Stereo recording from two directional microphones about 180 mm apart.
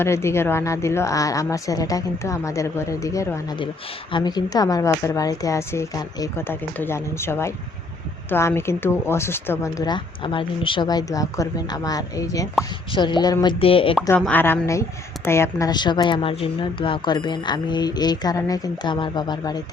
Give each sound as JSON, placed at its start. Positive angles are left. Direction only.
{"t": 0.0, "sound": "a woman's voice", "side_deg": 15}
{"t": 14.2, "sound": "a woman's voice", "side_deg": 10}